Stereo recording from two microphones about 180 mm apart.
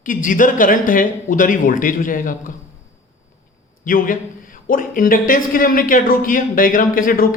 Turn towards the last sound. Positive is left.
turn(degrees=50)  # may be behind; listen again after turning